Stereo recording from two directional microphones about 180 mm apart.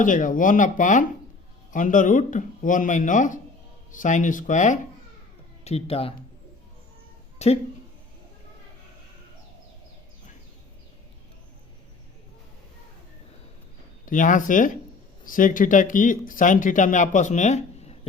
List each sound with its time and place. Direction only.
0.0 s speech: 45° left (ahead or behind)
7.3 s speech: 35° left (ahead or behind)
14.0 s speech: 45° left (ahead or behind)